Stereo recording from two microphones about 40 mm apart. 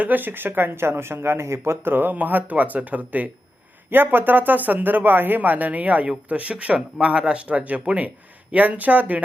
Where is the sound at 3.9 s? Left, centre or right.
Right.